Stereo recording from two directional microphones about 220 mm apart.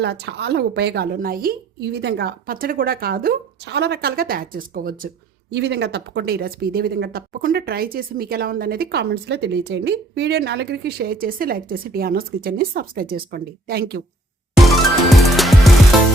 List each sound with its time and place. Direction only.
0.0 s speech: 50° right (ahead or behind)
14.5 s music: centre (ahead or behind)